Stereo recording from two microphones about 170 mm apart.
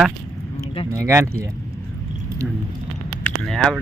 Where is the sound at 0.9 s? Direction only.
15° right (ahead or behind).